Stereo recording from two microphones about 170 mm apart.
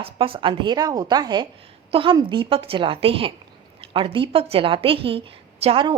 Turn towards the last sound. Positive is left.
turn(degrees=-30)  # may be behind; listen again after turning